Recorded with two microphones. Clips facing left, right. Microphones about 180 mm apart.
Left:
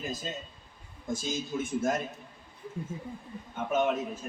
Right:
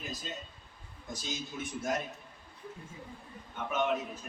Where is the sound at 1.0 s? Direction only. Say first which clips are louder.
Left 9 dB; 50° left (ahead or behind).